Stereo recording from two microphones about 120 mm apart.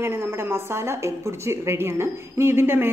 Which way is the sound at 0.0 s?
20° right (ahead or behind).